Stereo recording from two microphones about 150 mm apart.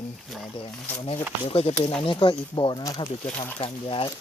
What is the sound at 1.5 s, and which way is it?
Speech, 40° left (ahead or behind).